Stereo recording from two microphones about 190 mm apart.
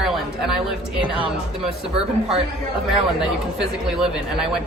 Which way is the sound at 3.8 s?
Centre (ahead or behind).